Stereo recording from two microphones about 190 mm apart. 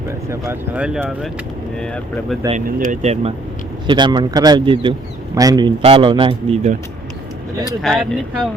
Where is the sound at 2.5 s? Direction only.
40° right (ahead or behind).